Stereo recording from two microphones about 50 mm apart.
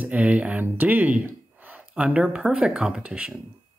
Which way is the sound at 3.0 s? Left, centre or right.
Right.